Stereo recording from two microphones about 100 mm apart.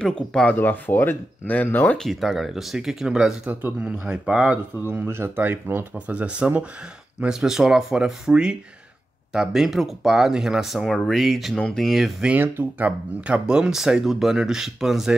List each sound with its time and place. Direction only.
0.0 s speech: 5° left (ahead or behind)
0.6 s speech: 20° left (ahead or behind)
2.0 s speech: centre (ahead or behind)
4.8 s speech: 25° right (ahead or behind); by 12.4 s 5° right (ahead or behind)
12.4 s speech: 20° right (ahead or behind)